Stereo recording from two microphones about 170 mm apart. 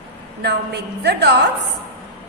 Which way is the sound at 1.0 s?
80° right.